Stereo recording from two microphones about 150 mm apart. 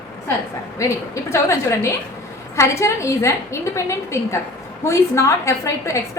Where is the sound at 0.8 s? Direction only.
20° left (ahead or behind).